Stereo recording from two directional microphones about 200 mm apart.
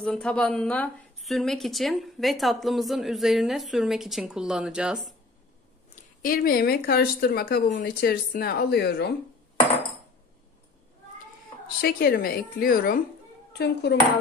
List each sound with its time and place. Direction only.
0.0 s a woman's voice: 5° left (ahead or behind)
5.9 s speech: 45° left (ahead or behind)
11.8 s speech: 50° left (ahead or behind)
13.5 s speech: 55° left (ahead or behind)